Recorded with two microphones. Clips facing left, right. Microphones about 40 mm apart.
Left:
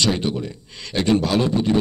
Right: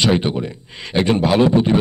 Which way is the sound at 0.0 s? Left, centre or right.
Right.